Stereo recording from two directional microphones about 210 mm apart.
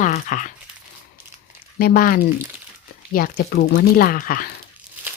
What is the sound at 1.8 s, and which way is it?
Speech, 45° left (ahead or behind).